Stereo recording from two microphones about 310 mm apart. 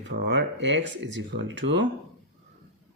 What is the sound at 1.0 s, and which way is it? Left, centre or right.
Speech, right.